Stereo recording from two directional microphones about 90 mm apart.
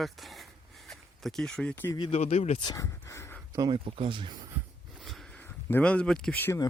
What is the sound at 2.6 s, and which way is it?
Speech, 40° left (ahead or behind).